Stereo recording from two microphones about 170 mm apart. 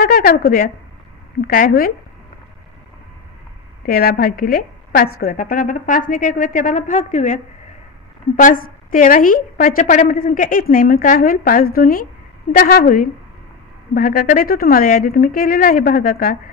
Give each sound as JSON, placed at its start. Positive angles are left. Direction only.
{"t": 0.0, "sound": "a woman's voice", "side_deg": 60}
{"t": 3.8, "sound": "a woman's voice", "side_deg": 60}
{"t": 8.4, "sound": "a woman's voice", "side_deg": 55}